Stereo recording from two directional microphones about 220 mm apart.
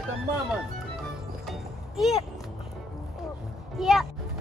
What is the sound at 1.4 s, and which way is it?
Music, centre (ahead or behind).